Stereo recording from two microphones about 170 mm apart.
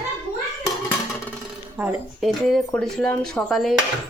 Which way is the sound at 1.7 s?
Centre (ahead or behind).